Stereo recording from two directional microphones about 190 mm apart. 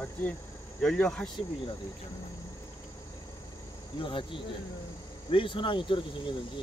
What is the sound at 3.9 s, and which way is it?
Speech, 25° left (ahead or behind).